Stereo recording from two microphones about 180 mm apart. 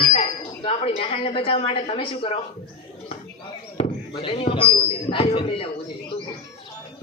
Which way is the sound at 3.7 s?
30° left (ahead or behind).